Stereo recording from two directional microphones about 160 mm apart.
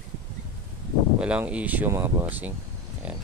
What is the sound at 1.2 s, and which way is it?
Speech, 5° right (ahead or behind).